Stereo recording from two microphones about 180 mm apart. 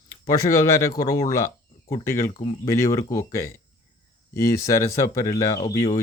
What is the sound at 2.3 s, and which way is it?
Speech, 30° left (ahead or behind).